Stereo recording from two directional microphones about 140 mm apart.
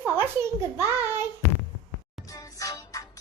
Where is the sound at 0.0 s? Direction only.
15° right (ahead or behind).